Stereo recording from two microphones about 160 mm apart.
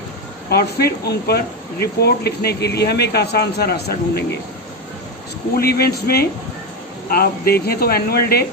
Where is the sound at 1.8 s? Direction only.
85° left.